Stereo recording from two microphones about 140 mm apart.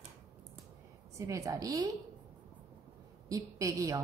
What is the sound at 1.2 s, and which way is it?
Speech, 25° right (ahead or behind).